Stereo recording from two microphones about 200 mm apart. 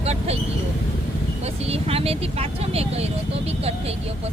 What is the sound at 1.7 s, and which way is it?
Speech, 30° right (ahead or behind).